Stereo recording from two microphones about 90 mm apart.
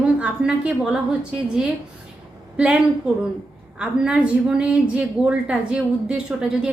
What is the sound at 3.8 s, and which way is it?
A woman's voice, 10° right (ahead or behind).